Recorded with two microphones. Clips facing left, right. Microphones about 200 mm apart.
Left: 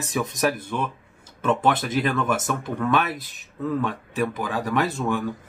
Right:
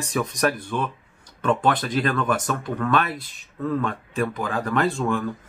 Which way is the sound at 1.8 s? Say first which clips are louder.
Even; 10° left (ahead or behind).